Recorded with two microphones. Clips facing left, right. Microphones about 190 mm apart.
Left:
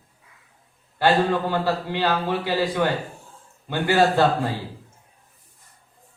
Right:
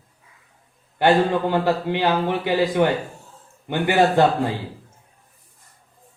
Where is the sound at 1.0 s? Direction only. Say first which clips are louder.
Right 2 dB; 20° right (ahead or behind).